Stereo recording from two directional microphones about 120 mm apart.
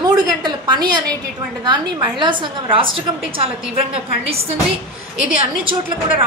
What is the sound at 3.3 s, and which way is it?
A man's voice, 50° right (ahead or behind).